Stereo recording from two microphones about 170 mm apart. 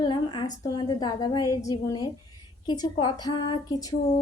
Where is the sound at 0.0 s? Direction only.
25° left (ahead or behind).